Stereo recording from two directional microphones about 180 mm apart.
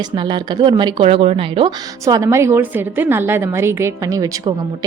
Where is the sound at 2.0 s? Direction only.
15° right (ahead or behind).